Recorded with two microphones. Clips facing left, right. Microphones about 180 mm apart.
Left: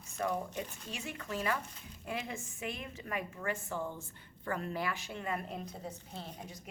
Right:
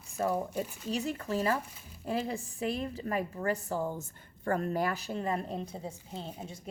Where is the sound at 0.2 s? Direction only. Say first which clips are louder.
Right 5 dB; 35° right (ahead or behind).